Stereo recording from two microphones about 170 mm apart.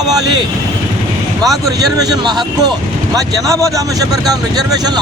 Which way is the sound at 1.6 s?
20° right (ahead or behind).